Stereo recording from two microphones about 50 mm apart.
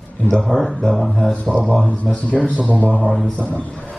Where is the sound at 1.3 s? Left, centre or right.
Left.